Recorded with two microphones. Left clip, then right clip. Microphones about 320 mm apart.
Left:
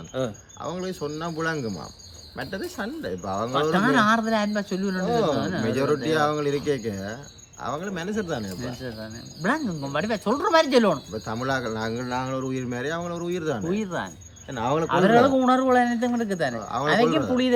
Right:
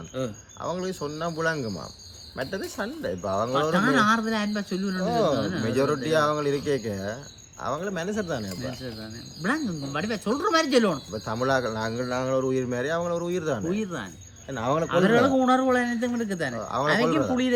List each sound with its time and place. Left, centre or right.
0.6 s speech: centre
3.6 s a man's voice: centre
5.6 s speech: centre
9.4 s a man's voice: centre
11.1 s speech: centre
13.7 s a man's voice: centre
14.5 s a man's voice: centre